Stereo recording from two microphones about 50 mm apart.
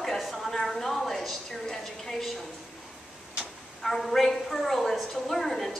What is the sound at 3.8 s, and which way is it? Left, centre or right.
A woman's voice, centre.